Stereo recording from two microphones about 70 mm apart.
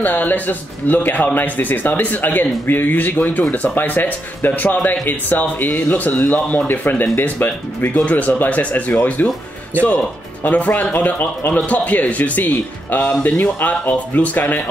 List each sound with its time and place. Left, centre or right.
0.0 s speech: left
10.4 s speech: left